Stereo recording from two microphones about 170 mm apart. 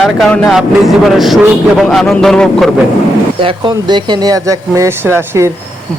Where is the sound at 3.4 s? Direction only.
30° right (ahead or behind).